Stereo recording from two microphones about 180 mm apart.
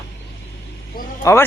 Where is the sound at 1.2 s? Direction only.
15° left (ahead or behind).